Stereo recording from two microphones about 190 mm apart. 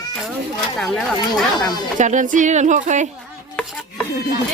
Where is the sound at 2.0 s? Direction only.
40° right (ahead or behind).